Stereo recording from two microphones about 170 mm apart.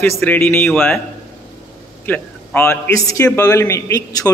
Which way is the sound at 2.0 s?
10° left (ahead or behind).